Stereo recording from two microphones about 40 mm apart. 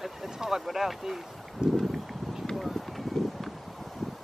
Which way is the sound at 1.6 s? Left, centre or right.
Centre.